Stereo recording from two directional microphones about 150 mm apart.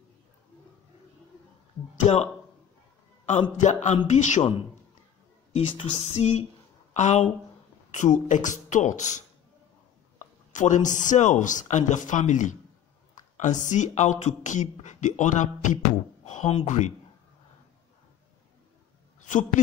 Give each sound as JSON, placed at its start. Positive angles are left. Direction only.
{"t": 2.1, "sound": "speech", "side_deg": 50}
{"t": 3.5, "sound": "speech", "side_deg": 55}
{"t": 5.5, "sound": "speech", "side_deg": 40}
{"t": 19.2, "sound": "a woman's voice", "side_deg": 55}